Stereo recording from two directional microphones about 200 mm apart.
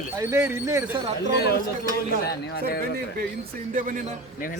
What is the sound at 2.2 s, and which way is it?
Speech, 50° left (ahead or behind).